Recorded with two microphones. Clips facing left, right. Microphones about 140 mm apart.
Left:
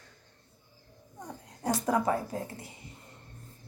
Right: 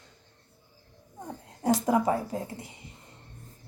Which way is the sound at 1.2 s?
20° right (ahead or behind).